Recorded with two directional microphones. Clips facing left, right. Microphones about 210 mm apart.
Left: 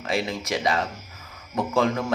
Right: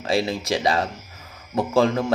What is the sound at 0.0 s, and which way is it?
A man's voice, 30° right (ahead or behind).